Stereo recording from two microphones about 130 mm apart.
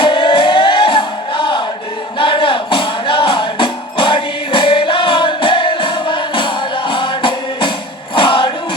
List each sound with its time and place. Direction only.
0.0 s music: 40° left (ahead or behind)